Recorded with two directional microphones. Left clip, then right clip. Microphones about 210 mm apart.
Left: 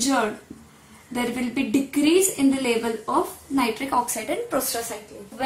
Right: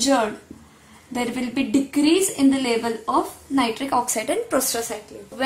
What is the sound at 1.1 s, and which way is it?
A woman's voice, 25° right (ahead or behind).